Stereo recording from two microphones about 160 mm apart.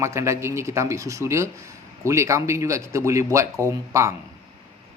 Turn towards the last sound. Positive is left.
turn(degrees=-20)  # may be behind; listen again after turning